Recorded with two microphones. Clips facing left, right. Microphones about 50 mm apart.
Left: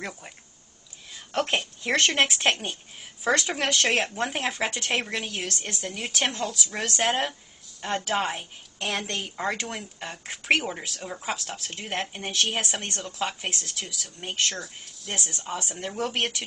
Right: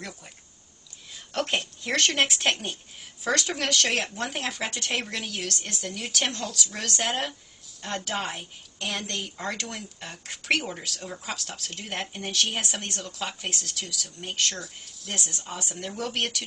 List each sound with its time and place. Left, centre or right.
1.5 s speech: centre
3.3 s speech: centre
14.6 s speech: centre; by 16.4 s left